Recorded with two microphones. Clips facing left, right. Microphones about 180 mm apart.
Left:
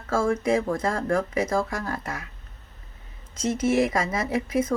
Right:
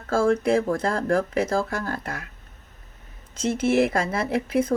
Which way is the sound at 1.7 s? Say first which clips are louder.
Right 1 dB; 65° right (ahead or behind).